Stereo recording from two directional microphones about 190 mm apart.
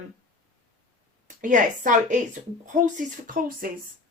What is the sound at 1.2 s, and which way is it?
Speech, 45° right (ahead or behind).